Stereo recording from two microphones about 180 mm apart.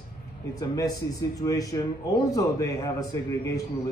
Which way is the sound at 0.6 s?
20° left (ahead or behind).